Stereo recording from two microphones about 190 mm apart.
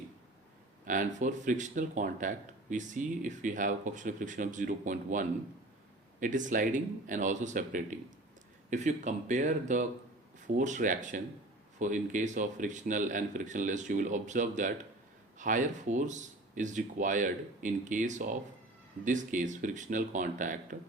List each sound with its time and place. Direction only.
0.9 s speech: 40° right (ahead or behind)